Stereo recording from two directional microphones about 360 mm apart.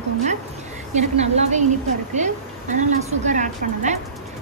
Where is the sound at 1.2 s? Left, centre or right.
Centre.